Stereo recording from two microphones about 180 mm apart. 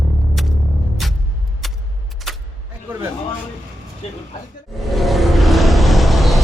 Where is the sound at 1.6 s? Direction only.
Centre (ahead or behind).